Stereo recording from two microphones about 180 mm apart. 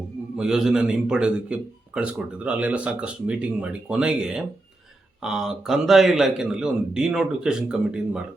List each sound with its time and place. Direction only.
0.3 s a man's voice: 5° right (ahead or behind)